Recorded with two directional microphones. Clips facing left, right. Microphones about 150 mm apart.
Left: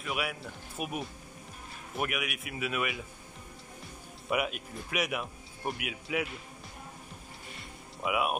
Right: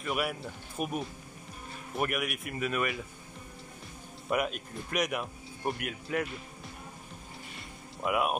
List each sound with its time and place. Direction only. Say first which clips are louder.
0.0 s speech: right 3 dB; centre (ahead or behind)
4.3 s speech: right 1 dB; 5° left (ahead or behind)
7.5 s music: right 1 dB; centre (ahead or behind)